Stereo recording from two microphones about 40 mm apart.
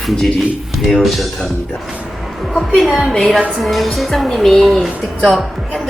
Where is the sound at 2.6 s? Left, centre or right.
Centre.